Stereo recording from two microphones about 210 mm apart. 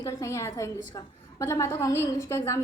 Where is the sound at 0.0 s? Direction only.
15° left (ahead or behind).